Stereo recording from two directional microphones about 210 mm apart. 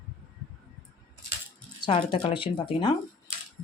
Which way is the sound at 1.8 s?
25° left (ahead or behind).